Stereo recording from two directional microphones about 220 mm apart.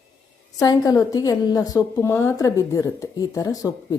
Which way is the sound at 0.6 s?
15° left (ahead or behind).